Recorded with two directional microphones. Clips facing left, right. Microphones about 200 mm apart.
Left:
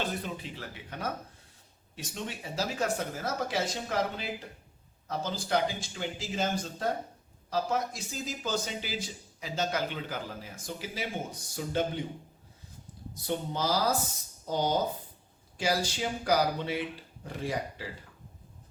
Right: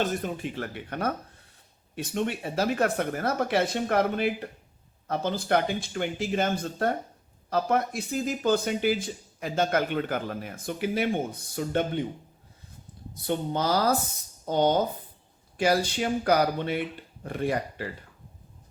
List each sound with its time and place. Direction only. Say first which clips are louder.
0.0 s speech: right 6 dB; 45° right (ahead or behind)
13.2 s speech: right 4 dB; 60° right (ahead or behind)